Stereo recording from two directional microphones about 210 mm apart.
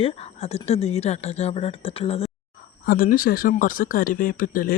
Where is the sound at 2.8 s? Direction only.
40° left (ahead or behind).